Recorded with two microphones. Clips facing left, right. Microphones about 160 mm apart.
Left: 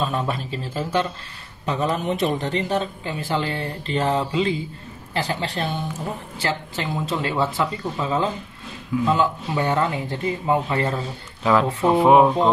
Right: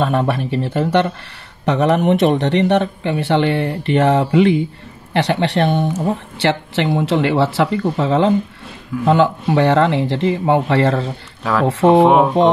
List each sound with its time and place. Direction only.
0.0 s speech: 65° right (ahead or behind)
12.0 s speech: centre (ahead or behind)